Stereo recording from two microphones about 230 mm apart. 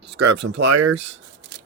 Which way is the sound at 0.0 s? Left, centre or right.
Right.